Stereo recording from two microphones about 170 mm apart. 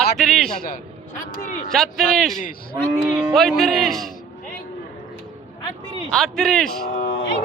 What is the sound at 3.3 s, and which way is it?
Speech, centre (ahead or behind).